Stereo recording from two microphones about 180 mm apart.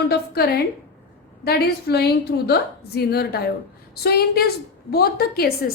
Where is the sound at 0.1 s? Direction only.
60° left (ahead or behind).